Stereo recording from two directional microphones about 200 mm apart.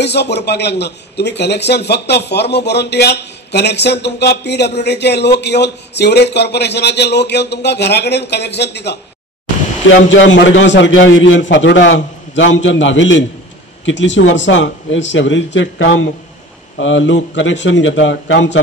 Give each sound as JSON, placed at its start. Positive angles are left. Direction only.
{"t": 0.0, "sound": "speech", "side_deg": 55}
{"t": 9.8, "sound": "a man's voice", "side_deg": 70}